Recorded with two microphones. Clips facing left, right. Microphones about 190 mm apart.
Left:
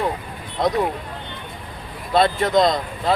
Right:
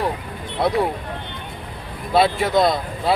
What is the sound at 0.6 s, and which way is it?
Speech, 10° right (ahead or behind).